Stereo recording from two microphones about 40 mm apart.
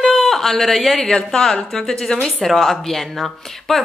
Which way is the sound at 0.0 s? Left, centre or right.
Centre.